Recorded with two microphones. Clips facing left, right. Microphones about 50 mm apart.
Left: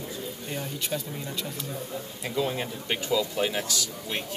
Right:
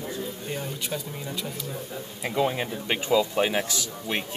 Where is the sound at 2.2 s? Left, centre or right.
Right.